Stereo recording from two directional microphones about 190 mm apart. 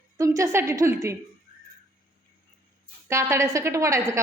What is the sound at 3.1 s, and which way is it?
A woman's voice, 15° right (ahead or behind).